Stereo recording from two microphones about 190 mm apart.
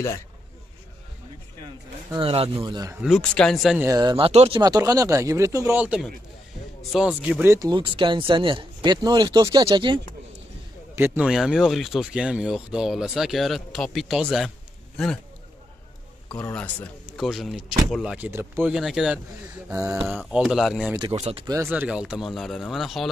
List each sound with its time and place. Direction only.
2.1 s speech: 30° right (ahead or behind)
3.0 s speech: centre (ahead or behind)
3.8 s speech: 20° right (ahead or behind)
4.3 s speech: 35° right (ahead or behind)
4.6 s speech: 20° right (ahead or behind)
11.0 s speech: 5° right (ahead or behind)
16.3 s a man's voice: 15° left (ahead or behind)
17.2 s speech: centre (ahead or behind)
19.7 s speech: 15° right (ahead or behind)
20.0 s speech: centre (ahead or behind)
21.1 s speech: 30° right (ahead or behind)
21.5 s speech: 10° right (ahead or behind)